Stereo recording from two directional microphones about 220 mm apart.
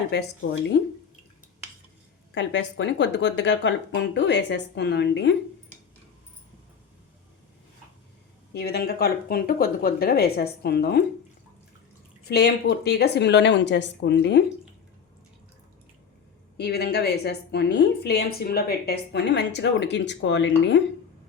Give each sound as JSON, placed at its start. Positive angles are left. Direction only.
{"t": 2.3, "sound": "a woman's voice", "side_deg": 55}
{"t": 8.5, "sound": "a woman's voice", "side_deg": 45}
{"t": 12.3, "sound": "a woman's voice", "side_deg": 45}
{"t": 16.6, "sound": "a woman's voice", "side_deg": 50}